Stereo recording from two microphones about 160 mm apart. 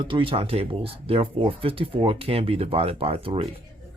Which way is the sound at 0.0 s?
30° right (ahead or behind).